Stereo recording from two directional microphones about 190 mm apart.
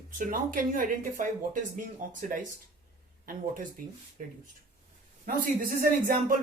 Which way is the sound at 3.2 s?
45° right (ahead or behind).